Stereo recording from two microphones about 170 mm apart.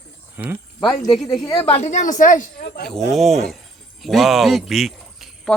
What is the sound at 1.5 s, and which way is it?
Speech, 15° left (ahead or behind).